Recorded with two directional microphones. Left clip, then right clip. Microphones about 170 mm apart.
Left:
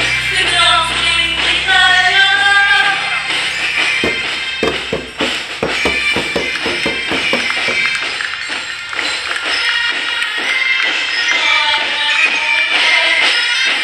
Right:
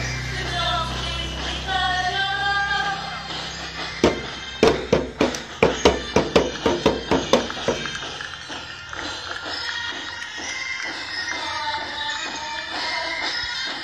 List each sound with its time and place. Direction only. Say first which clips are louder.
0.4 s music: left 12 dB; 15° left (ahead or behind)
6.8 s music: left 5 dB; 15° left (ahead or behind)
10.5 s music: left 15 dB; 20° left (ahead or behind)
13.1 s music: left 14 dB; 45° left (ahead or behind)
13.5 s music: left 14 dB; 15° left (ahead or behind)